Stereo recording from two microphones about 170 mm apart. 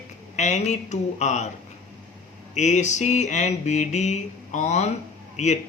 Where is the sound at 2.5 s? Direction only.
45° left (ahead or behind).